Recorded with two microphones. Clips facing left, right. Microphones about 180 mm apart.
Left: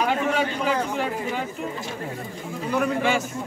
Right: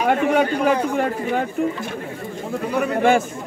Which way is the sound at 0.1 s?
55° right (ahead or behind).